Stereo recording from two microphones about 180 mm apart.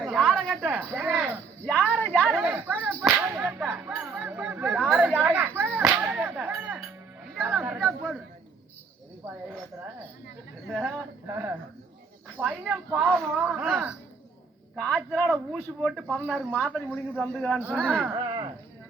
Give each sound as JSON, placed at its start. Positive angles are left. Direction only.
{"t": 0.0, "sound": "a sound", "side_deg": -5}
{"t": 0.6, "sound": "speech", "side_deg": -10}
{"t": 3.0, "sound": "whip", "side_deg": -10}
{"t": 5.2, "sound": "a sound", "side_deg": -10}
{"t": 5.8, "sound": "whip", "side_deg": -5}
{"t": 7.4, "sound": "chatter", "side_deg": -10}
{"t": 10.7, "sound": "a man's voice", "side_deg": -5}
{"t": 12.4, "sound": "a man's voice", "side_deg": -10}
{"t": 18.2, "sound": "speech", "side_deg": -25}